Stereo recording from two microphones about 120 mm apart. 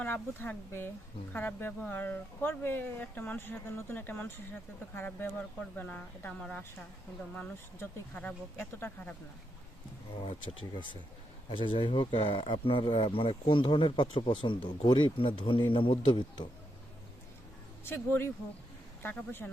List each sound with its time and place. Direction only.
0.0 s speech: 15° left (ahead or behind)
11.5 s speech: 45° left (ahead or behind)
17.8 s speech: 20° left (ahead or behind)